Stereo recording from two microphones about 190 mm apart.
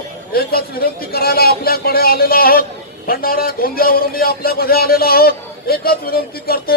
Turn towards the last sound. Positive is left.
turn(degrees=50)  # may be behind; listen again after turning